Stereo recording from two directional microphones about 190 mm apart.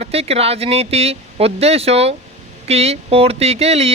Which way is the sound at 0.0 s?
30° right (ahead or behind).